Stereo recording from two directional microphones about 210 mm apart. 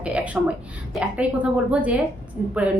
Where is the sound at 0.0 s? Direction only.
5° right (ahead or behind).